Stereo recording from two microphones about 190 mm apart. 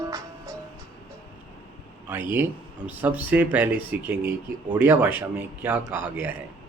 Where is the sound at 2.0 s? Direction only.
10° right (ahead or behind).